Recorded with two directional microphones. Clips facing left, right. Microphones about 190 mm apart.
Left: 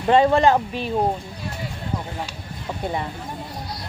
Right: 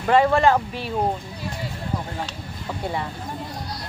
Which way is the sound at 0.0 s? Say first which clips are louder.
Left 1 dB; 20° left (ahead or behind).